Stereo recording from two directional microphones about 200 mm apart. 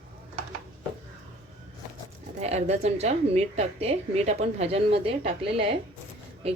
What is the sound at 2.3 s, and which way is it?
A woman's voice, 35° right (ahead or behind).